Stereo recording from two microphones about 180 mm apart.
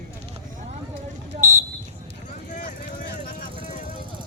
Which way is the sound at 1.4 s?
45° right (ahead or behind).